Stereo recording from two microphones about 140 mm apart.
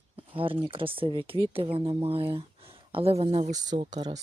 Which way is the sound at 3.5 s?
30° right (ahead or behind).